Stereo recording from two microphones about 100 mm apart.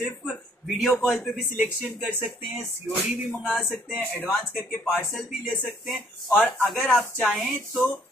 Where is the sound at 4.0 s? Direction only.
20° left (ahead or behind).